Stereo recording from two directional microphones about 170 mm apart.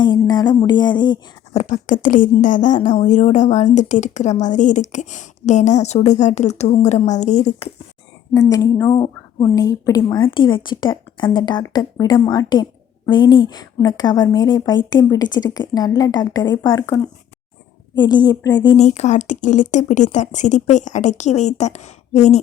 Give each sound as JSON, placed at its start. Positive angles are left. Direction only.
{"t": 0.0, "sound": "a sound", "side_deg": 25}
{"t": 1.5, "sound": "a woman's voice", "side_deg": 45}
{"t": 8.3, "sound": "speech", "side_deg": 20}
{"t": 18.8, "sound": "a woman's voice", "side_deg": 45}